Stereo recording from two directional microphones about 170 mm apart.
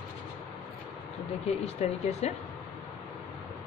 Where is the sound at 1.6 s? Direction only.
40° left (ahead or behind).